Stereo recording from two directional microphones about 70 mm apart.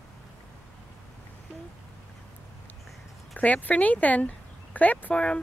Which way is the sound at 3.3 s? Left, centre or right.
Left.